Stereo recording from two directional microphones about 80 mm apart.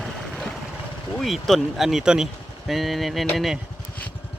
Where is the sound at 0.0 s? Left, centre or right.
Centre.